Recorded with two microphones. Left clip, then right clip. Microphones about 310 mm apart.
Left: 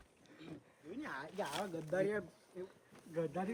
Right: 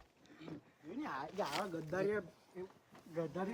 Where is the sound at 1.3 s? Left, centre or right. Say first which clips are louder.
Right 2 dB; right.